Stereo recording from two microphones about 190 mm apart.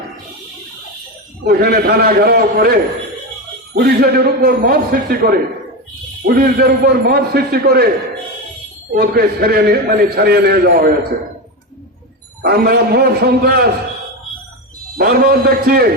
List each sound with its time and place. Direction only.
1.5 s a man's voice: 55° right (ahead or behind)
3.8 s a man's voice: 55° right (ahead or behind)
9.0 s a man's voice: 55° right (ahead or behind)
12.4 s a man's voice: 55° right (ahead or behind)
14.9 s a man's voice: 55° right (ahead or behind)